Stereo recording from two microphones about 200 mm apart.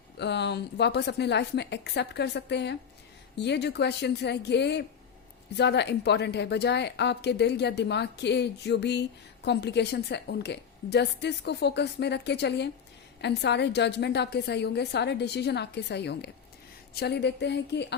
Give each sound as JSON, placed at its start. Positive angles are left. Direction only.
{"t": 0.2, "sound": "a woman's voice", "side_deg": 60}